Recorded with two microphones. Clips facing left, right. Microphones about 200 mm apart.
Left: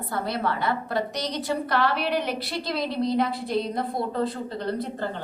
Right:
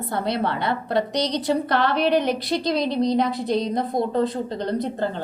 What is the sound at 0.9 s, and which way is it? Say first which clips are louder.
Speech: right 5 dB; 70° right (ahead or behind).